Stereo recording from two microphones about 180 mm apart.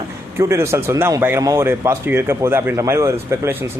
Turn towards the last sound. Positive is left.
turn(degrees=-15)  # may be behind; listen again after turning